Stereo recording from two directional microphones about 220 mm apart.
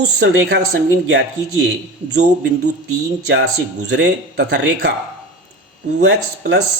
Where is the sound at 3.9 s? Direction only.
50° right (ahead or behind).